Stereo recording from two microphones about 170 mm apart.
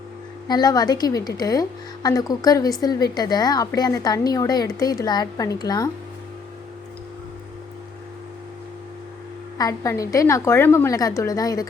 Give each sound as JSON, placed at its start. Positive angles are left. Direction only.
{"t": 0.4, "sound": "a woman's voice", "side_deg": 25}
{"t": 9.6, "sound": "a woman's voice", "side_deg": 20}